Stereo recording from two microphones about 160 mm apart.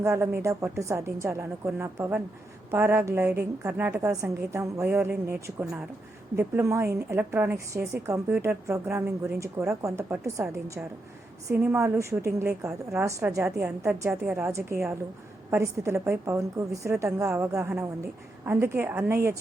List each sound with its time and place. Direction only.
0.0 s a woman's voice: 15° right (ahead or behind)